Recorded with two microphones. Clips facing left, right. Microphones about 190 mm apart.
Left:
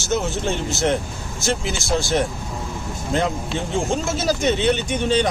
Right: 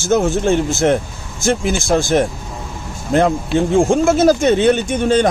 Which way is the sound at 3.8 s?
55° right (ahead or behind).